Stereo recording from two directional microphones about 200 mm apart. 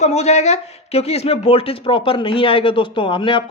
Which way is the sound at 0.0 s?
35° left (ahead or behind).